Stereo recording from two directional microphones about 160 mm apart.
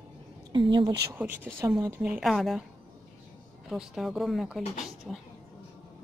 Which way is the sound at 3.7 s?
Centre (ahead or behind).